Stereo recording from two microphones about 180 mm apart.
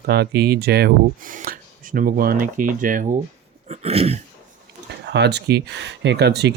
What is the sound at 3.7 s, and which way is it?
Throat clearing, 35° right (ahead or behind).